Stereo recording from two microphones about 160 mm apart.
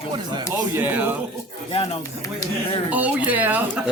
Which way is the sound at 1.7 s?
40° left (ahead or behind).